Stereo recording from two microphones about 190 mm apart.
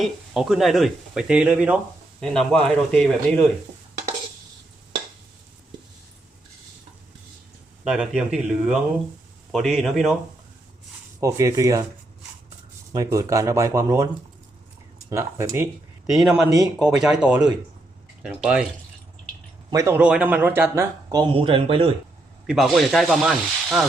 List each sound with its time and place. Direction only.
0.0 s speech: centre (ahead or behind)
7.9 s speech: 5° right (ahead or behind)
11.2 s speech: 15° right (ahead or behind)
12.9 s speech: 15° right (ahead or behind)
15.1 s speech: 15° right (ahead or behind)
16.0 s speech: centre (ahead or behind)
19.7 s speech: 15° right (ahead or behind); by 21.9 s 30° right (ahead or behind)
22.4 s speech: centre (ahead or behind)